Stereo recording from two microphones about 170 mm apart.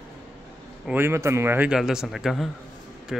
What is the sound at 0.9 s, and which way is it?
A man's voice, 15° right (ahead or behind).